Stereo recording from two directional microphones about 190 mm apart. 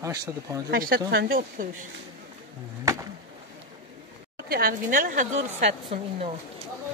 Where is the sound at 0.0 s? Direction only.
20° right (ahead or behind).